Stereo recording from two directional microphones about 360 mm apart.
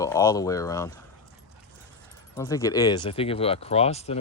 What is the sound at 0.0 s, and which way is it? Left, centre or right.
Speech, centre.